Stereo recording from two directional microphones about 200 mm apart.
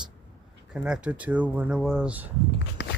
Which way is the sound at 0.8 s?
5° right (ahead or behind).